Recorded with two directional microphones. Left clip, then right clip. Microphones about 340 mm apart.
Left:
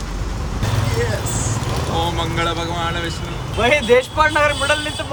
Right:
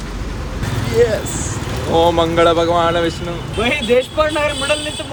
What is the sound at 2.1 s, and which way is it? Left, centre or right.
Speech, right.